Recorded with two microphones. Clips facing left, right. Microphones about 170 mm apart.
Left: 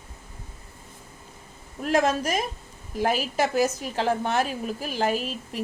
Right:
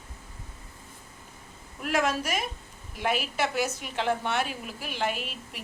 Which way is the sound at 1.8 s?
35° left (ahead or behind).